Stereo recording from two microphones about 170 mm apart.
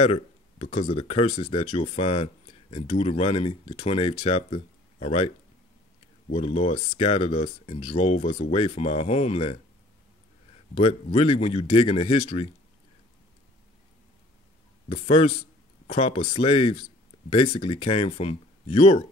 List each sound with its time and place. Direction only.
0.0 s speech: 35° left (ahead or behind)
6.3 s speech: 35° left (ahead or behind)
10.7 s speech: 35° left (ahead or behind)
14.9 s speech: 35° left (ahead or behind)